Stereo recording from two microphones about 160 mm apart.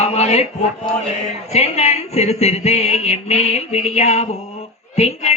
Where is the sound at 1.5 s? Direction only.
40° left (ahead or behind).